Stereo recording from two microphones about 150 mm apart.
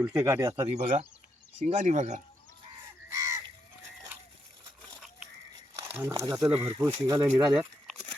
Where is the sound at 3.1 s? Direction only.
20° right (ahead or behind).